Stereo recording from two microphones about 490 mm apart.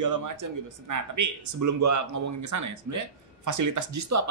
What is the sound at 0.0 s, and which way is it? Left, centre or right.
Speech, right.